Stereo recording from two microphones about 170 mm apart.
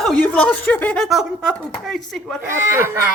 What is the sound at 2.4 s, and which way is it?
Speech, 15° right (ahead or behind).